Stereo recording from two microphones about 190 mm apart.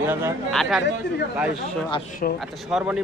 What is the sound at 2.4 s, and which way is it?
Speech, 5° right (ahead or behind).